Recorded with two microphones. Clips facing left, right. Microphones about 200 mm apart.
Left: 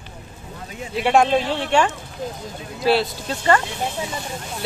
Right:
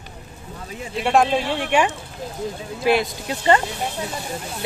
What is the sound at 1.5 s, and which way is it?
Speech, 15° right (ahead or behind).